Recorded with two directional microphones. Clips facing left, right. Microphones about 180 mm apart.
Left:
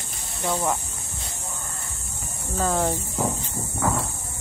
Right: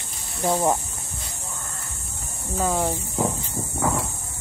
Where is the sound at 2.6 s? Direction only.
10° right (ahead or behind).